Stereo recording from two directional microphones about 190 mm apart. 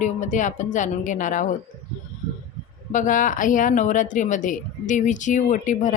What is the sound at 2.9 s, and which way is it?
Speech, 40° left (ahead or behind).